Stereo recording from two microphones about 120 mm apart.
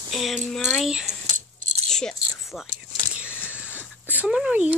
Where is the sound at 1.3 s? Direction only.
80° right.